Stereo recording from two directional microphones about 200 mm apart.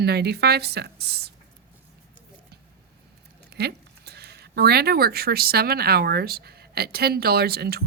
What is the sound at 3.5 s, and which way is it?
Speech, 55° right (ahead or behind).